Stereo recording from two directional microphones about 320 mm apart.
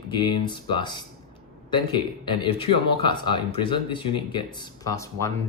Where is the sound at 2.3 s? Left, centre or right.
Centre.